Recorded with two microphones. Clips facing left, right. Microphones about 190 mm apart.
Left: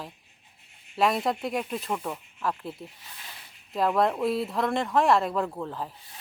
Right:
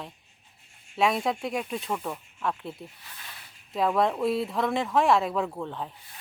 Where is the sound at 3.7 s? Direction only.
Centre (ahead or behind).